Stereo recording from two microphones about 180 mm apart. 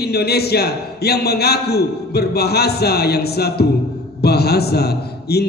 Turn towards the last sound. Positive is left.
turn(degrees=65)  # may be behind; listen again after turning